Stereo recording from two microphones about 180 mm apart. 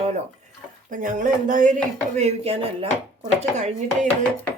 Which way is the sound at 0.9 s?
45° right (ahead or behind).